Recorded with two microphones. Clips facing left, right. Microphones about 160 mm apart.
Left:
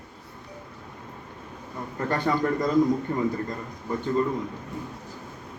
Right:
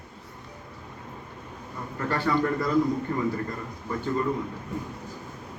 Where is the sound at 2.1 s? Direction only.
20° left (ahead or behind).